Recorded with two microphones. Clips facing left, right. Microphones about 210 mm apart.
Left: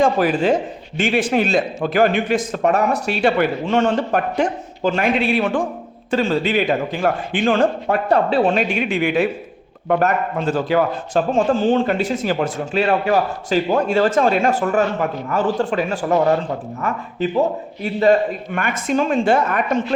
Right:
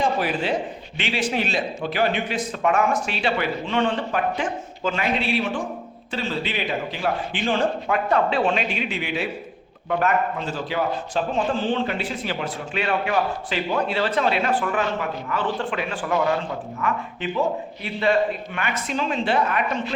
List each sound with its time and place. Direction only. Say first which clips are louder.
0.0 s a man's voice: left 7 dB; 45° left (ahead or behind)
7.9 s a man's voice: left 4 dB; 35° left (ahead or behind)